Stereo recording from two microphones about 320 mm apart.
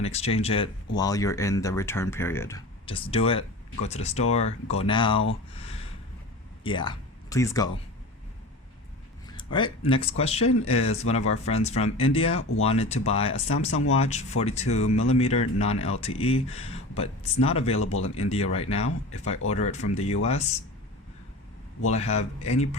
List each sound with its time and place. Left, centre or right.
0.0 s speech: centre
6.7 s speech: centre
9.3 s a sound: centre
9.9 s speech: centre
12.4 s speech: left
12.6 s speech: centre
21.8 s speech: left